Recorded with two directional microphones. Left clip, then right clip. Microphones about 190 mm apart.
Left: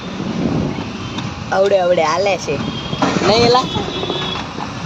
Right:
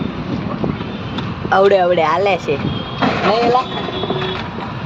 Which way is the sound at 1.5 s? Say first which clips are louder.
Right 2 dB; 10° right (ahead or behind).